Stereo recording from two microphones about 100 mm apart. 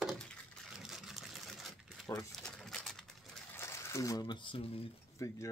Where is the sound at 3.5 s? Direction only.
25° left (ahead or behind).